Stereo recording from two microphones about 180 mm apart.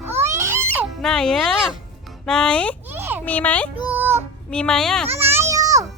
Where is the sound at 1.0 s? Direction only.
5° left (ahead or behind).